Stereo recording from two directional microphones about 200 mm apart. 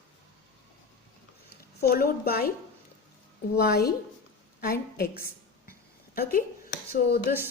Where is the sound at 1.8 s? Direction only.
50° left (ahead or behind).